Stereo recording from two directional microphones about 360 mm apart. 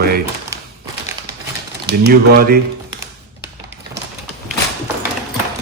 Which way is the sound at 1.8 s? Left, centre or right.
Right.